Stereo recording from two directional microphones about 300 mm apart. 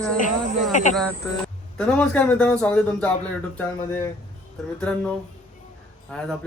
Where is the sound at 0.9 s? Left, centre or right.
Centre.